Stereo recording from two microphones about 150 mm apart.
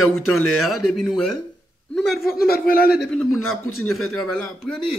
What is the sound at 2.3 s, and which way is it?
Speech, 80° left.